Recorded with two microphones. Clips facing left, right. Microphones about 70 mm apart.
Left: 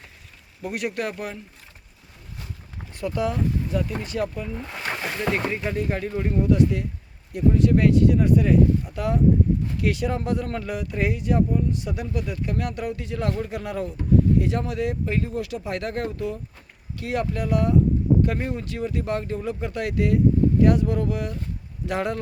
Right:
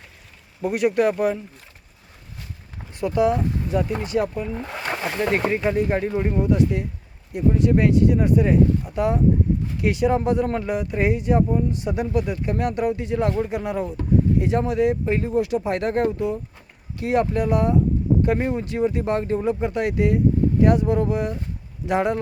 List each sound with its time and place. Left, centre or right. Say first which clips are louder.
0.6 s speech: right 8 dB; centre
3.0 s speech: right 5 dB; centre